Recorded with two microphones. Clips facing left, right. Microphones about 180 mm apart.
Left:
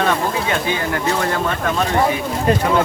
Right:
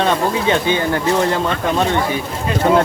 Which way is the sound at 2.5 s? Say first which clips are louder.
Left 4 dB; 45° left (ahead or behind).